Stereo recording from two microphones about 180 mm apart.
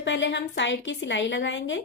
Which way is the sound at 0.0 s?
90° left.